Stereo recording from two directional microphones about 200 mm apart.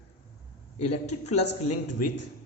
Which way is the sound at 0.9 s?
35° left (ahead or behind).